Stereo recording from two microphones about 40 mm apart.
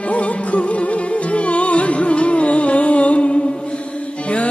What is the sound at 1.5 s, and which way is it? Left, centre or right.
Music, left.